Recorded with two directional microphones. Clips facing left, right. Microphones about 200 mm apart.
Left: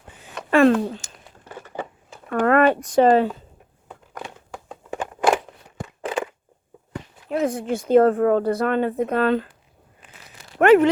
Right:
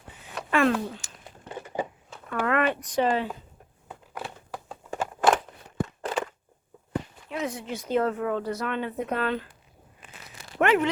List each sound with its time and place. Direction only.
0.5 s speech: 35° left (ahead or behind)
1.5 s a sound: 15° right (ahead or behind)
2.3 s speech: 45° left (ahead or behind)
3.8 s crumpling: 5° right (ahead or behind)
7.3 s speech: 50° left (ahead or behind)
10.6 s speech: 45° left (ahead or behind)